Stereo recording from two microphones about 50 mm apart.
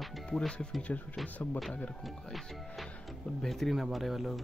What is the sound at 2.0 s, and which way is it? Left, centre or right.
Speech, centre.